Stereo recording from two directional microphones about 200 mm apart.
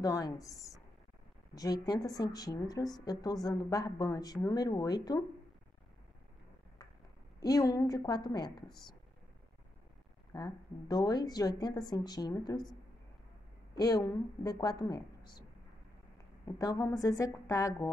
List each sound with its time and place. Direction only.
0.0 s a woman's voice: 20° left (ahead or behind)
7.3 s a woman's voice: 20° left (ahead or behind)
10.3 s a woman's voice: 20° left (ahead or behind)
13.7 s a woman's voice: 20° left (ahead or behind)
16.4 s a woman's voice: 15° left (ahead or behind)